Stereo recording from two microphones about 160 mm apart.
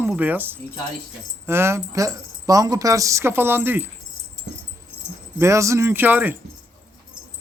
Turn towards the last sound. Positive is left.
turn(degrees=-10)  # may be behind; listen again after turning